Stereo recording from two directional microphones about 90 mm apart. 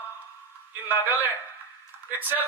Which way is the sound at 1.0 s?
20° right (ahead or behind).